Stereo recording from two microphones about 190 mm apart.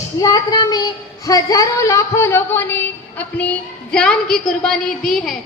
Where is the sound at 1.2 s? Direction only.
20° left (ahead or behind).